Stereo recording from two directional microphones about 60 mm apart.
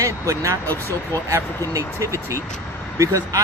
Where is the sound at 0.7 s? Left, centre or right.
Left.